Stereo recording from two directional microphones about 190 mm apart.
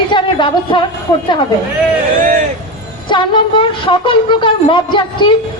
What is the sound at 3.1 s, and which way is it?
A woman's voice, 25° left (ahead or behind).